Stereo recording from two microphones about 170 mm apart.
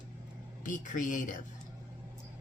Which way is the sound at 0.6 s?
50° left (ahead or behind).